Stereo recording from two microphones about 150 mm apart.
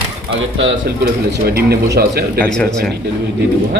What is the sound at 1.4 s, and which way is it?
Speech, 90° right.